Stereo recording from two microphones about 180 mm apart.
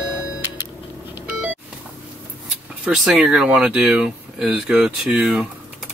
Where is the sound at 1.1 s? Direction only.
10° right (ahead or behind).